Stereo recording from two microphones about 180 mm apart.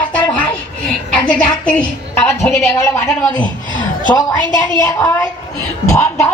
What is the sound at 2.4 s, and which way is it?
A woman's voice, 15° left (ahead or behind).